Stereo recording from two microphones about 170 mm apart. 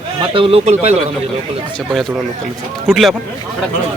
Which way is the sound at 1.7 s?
Centre (ahead or behind).